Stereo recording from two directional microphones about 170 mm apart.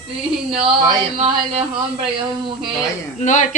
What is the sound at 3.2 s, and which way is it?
Speech, 45° left (ahead or behind).